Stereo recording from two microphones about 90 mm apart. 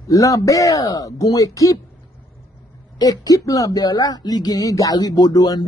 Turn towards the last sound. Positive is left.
turn(degrees=45)  # may be behind; listen again after turning